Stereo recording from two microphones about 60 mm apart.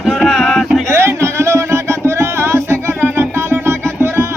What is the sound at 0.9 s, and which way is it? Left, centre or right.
Music, right.